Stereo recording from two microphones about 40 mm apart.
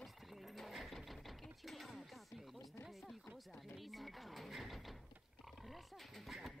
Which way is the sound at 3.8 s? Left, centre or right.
Centre.